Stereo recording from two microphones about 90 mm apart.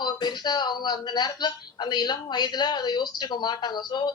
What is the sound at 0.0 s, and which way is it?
Speech, 55° left (ahead or behind).